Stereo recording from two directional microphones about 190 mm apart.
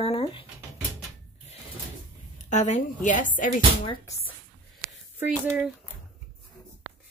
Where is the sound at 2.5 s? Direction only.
40° left (ahead or behind).